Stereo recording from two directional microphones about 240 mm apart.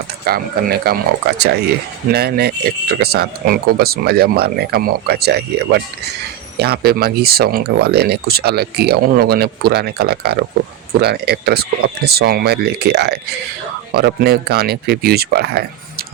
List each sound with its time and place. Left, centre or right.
0.3 s speech: right